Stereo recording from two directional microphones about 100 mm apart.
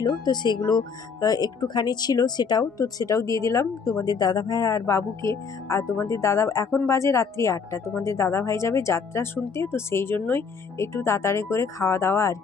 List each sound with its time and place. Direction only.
0.0 s speech: 45° left (ahead or behind); by 12.4 s 30° left (ahead or behind)